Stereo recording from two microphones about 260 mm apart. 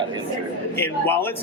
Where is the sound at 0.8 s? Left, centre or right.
Centre.